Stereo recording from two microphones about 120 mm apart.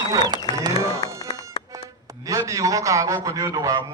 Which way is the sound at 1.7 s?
25° right (ahead or behind).